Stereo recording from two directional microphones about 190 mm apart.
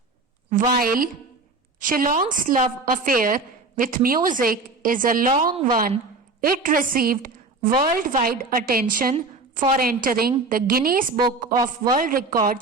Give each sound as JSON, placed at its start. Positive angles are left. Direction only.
{"t": 0.5, "sound": "a woman's voice", "side_deg": -50}
{"t": 9.1, "sound": "a woman's voice", "side_deg": -35}
{"t": 9.7, "sound": "a woman's voice", "side_deg": -50}